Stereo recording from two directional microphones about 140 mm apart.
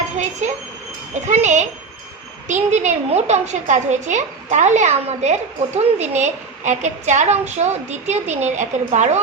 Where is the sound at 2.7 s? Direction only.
55° right (ahead or behind).